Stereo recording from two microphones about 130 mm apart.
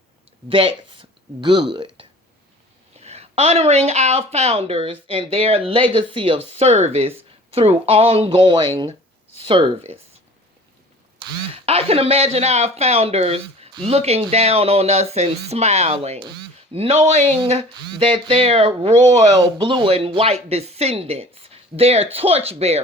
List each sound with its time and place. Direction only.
0.4 s speech: 40° right (ahead or behind)
3.0 s speech: 55° right (ahead or behind)
6.5 s speech: 50° right (ahead or behind)
11.6 s speech: 50° right (ahead or behind)
19.3 s speech: 35° right (ahead or behind); by 22.8 s 55° right (ahead or behind)